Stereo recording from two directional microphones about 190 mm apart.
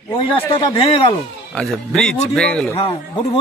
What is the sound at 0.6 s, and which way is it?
Speech, 25° left (ahead or behind).